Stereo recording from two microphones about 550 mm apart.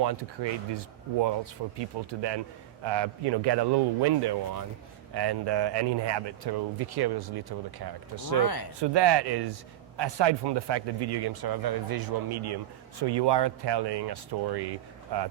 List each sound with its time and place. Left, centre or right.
0.0 s speech: right
1.8 s speech: right
8.4 s speech: left
8.8 s speech: right